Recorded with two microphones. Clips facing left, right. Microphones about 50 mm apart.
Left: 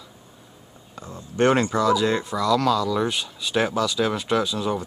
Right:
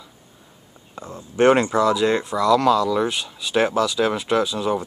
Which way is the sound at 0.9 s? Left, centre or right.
Centre.